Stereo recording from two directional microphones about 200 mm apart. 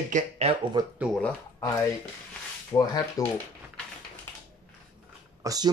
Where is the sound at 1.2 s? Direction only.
15° left (ahead or behind).